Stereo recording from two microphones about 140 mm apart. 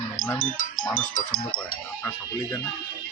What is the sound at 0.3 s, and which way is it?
Speech, 75° left (ahead or behind).